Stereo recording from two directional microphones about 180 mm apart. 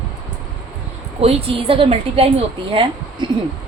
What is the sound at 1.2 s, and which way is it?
A woman's voice, 35° right (ahead or behind).